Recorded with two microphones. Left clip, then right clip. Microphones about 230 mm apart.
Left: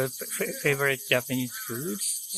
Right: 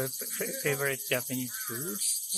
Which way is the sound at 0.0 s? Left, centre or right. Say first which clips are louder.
Left 5 dB; left.